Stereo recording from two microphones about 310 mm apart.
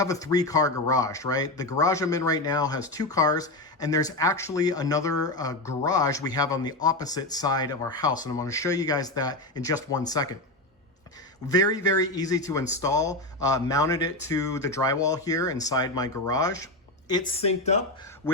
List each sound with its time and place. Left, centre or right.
0.0 s speech: centre
11.4 s speech: centre